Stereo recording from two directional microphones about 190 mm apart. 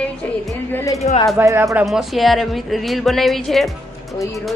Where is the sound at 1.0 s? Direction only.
35° left (ahead or behind).